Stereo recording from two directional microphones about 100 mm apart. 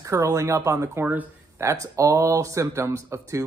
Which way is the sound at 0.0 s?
30° right (ahead or behind).